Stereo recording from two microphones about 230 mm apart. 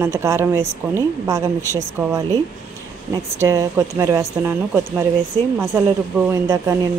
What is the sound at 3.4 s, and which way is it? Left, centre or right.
Speech, centre.